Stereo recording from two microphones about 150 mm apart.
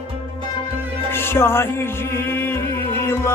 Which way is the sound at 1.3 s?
15° left (ahead or behind).